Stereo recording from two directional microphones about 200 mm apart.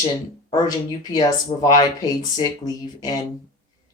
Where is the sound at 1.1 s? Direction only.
20° left (ahead or behind).